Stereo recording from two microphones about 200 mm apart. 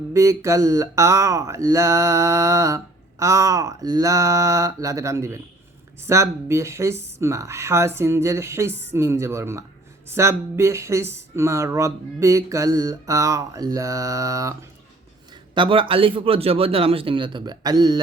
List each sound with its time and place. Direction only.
0.1 s speech: 15° right (ahead or behind)
15.5 s a man's voice: 25° right (ahead or behind)